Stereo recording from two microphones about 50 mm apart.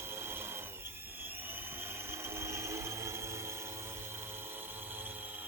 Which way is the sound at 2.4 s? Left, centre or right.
Right.